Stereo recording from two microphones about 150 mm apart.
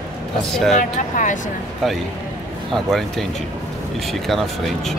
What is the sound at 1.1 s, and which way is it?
Speech, 60° left (ahead or behind).